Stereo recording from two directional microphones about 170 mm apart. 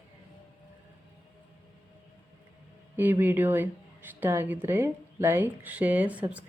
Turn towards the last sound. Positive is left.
turn(degrees=-10)  # may be behind; listen again after turning